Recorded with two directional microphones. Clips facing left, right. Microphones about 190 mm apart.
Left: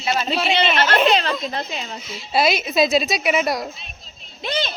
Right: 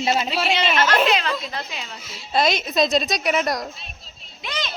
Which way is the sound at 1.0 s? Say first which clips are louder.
Left 3 dB; 35° left (ahead or behind).